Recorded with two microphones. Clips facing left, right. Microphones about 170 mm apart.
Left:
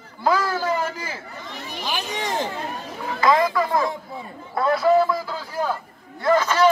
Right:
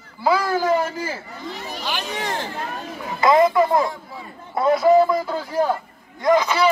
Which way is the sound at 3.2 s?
20° right (ahead or behind).